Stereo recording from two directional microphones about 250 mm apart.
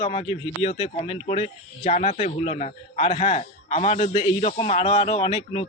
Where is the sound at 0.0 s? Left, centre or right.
Left.